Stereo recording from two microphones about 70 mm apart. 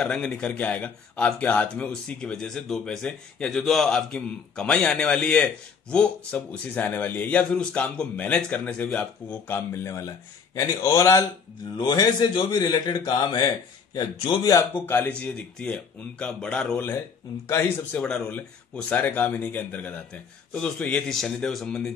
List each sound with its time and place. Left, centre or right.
0.1 s a man's voice: centre
9.8 s a man's voice: left
11.7 s a man's voice: left
12.0 s a man's voice: left
14.7 s a man's voice: left; by 16.7 s centre
16.7 s speech: left
18.0 s a man's voice: centre
18.3 s a man's voice: left
21.1 s a man's voice: centre